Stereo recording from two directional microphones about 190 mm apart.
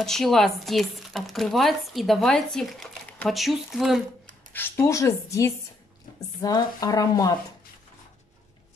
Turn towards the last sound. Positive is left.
turn(degrees=20)  # may be behind; listen again after turning